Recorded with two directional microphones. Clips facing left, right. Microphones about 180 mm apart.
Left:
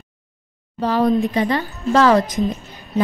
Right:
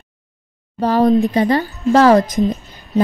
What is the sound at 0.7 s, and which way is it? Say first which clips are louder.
A woman's voice: right 4 dB; 40° right (ahead or behind).